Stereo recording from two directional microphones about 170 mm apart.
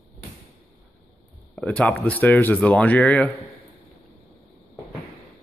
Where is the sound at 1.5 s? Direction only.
5° left (ahead or behind).